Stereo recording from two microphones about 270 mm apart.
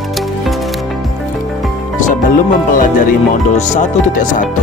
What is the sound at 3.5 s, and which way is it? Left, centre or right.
Speech, left.